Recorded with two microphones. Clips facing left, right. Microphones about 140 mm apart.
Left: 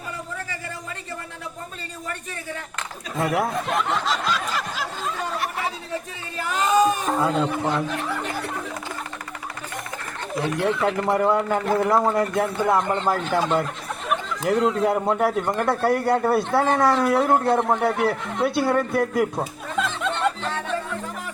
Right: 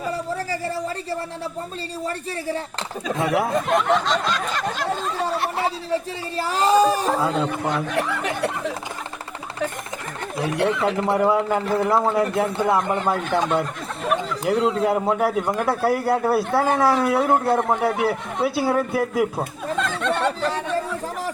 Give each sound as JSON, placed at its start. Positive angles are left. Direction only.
{"t": 3.2, "sound": "speech", "side_deg": 0}
{"t": 5.4, "sound": "speech", "side_deg": -30}
{"t": 7.2, "sound": "speech", "side_deg": 0}
{"t": 7.9, "sound": "speech", "side_deg": -75}
{"t": 10.8, "sound": "speech", "side_deg": 0}